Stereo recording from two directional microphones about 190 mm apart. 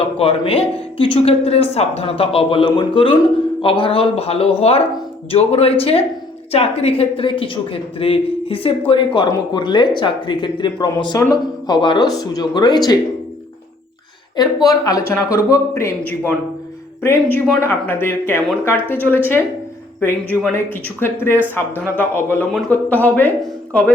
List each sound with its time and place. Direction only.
0.2 s speech: 30° left (ahead or behind)
14.3 s speech: 20° left (ahead or behind)